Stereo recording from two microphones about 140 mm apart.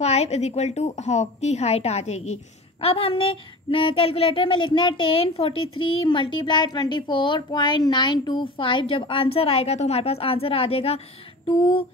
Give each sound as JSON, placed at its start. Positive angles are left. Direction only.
{"t": 0.0, "sound": "a woman's voice", "side_deg": 50}